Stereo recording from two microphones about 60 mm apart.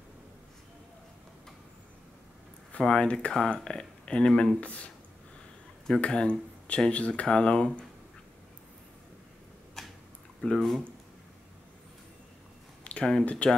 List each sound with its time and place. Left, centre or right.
2.8 s speech: centre
5.9 s speech: centre
9.8 s tick-tock: centre
10.4 s speech: centre
12.8 s speech: centre